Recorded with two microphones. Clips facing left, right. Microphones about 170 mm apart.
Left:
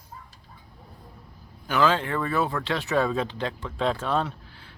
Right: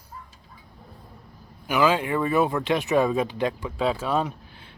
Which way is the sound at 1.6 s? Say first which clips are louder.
Right 1 dB; 10° right (ahead or behind).